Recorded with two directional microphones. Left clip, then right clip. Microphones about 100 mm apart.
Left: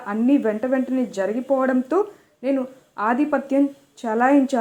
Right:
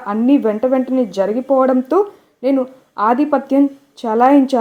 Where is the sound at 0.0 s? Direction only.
40° right (ahead or behind).